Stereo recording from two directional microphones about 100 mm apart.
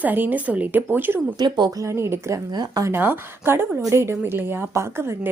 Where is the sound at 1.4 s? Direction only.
45° right (ahead or behind).